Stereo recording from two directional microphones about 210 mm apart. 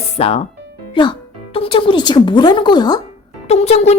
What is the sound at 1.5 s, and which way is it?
A woman's voice, 25° left (ahead or behind).